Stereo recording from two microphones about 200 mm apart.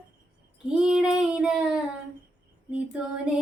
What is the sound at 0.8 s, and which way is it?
Child singing, centre (ahead or behind).